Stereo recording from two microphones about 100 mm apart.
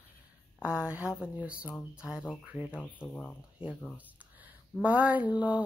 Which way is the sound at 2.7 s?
15° left (ahead or behind).